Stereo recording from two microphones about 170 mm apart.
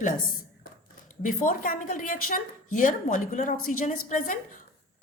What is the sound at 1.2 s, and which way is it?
A woman's voice, 55° left (ahead or behind).